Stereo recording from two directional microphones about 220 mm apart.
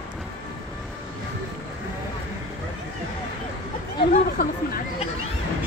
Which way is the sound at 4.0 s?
45° left (ahead or behind).